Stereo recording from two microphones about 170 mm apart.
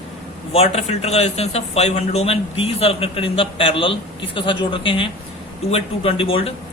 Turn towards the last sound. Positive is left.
turn(degrees=35)  # may be behind; listen again after turning